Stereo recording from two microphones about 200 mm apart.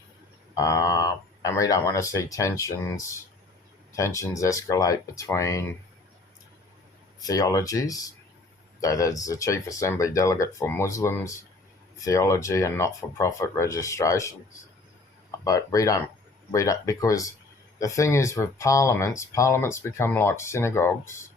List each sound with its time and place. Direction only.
0.5 s speech: 15° left (ahead or behind)
7.2 s speech: 20° left (ahead or behind)
15.4 s speech: 15° left (ahead or behind)